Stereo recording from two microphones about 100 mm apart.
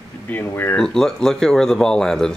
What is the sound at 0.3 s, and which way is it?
Speech, 20° left (ahead or behind).